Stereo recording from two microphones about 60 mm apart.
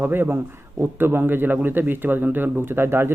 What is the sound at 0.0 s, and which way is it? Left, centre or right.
A man's voice, right.